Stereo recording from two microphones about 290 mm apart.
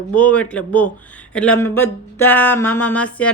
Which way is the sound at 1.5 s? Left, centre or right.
Centre.